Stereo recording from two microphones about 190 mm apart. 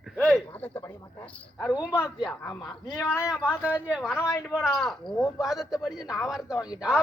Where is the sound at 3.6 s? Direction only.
5° right (ahead or behind).